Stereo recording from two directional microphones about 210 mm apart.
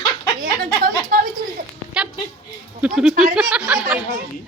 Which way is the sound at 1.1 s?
45° right (ahead or behind).